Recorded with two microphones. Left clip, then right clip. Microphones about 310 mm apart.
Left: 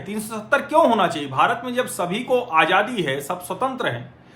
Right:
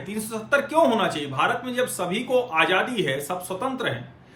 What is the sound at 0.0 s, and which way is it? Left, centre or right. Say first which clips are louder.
A man's voice: left 2 dB; centre.